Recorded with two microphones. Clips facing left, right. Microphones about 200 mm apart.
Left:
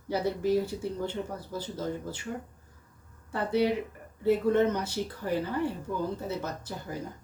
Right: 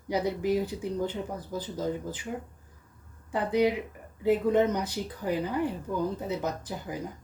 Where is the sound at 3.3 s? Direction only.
15° right (ahead or behind).